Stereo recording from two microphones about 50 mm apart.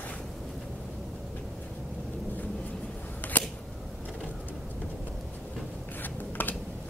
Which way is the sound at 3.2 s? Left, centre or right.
Left.